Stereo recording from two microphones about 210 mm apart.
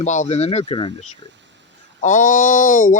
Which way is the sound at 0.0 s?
35° left (ahead or behind).